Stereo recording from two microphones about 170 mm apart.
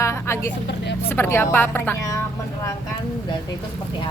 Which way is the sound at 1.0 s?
15° left (ahead or behind).